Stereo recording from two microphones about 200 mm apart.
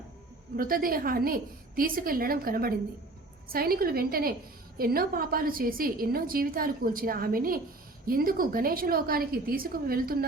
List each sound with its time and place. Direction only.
0.5 s a woman's voice: 45° right (ahead or behind)